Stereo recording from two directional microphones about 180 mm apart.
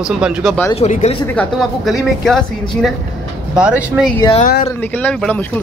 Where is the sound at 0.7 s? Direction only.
35° left (ahead or behind).